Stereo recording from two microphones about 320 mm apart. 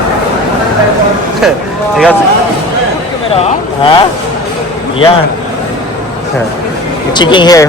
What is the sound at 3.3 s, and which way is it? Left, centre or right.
Vehicle, centre.